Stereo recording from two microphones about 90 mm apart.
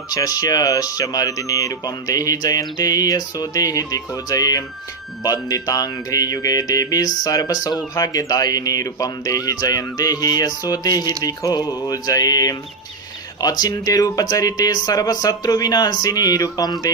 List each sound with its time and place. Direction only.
0.1 s speech: 45° left (ahead or behind)